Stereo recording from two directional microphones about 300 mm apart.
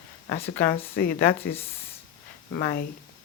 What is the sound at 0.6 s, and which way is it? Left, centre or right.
Speech, centre.